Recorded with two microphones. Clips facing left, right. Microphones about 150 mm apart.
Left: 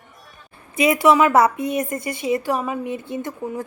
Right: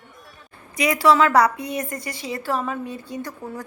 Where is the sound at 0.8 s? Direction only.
25° left (ahead or behind).